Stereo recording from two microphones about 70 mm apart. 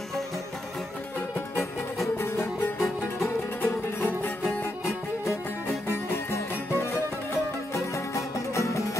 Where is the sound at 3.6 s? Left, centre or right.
Left.